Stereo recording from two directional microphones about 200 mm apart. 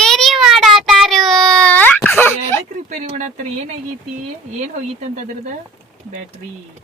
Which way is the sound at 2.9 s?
40° right (ahead or behind).